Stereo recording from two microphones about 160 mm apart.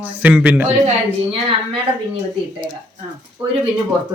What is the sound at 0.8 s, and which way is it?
Speech, 35° right (ahead or behind).